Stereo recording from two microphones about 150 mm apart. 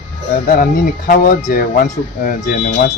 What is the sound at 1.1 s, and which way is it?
Speech, 70° left (ahead or behind).